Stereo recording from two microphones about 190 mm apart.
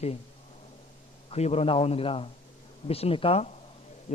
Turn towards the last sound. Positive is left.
turn(degrees=35)  # may be behind; listen again after turning